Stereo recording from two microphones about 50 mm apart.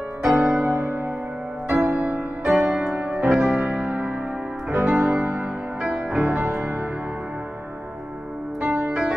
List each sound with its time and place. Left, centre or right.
0.2 s music: centre
0.5 s music: right
0.8 s music: right
1.7 s music: centre
2.0 s music: right; by 3.5 s centre
3.5 s music: right
6.5 s music: right
8.5 s music: right